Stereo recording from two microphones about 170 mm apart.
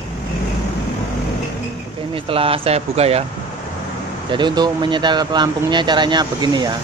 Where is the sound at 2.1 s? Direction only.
35° right (ahead or behind).